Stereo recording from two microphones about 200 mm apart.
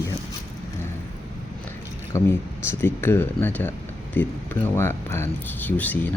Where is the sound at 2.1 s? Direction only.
15° left (ahead or behind).